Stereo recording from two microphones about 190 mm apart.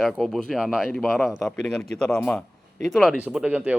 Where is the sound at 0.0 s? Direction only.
Centre (ahead or behind).